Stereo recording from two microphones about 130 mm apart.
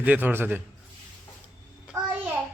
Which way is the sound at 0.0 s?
15° right (ahead or behind).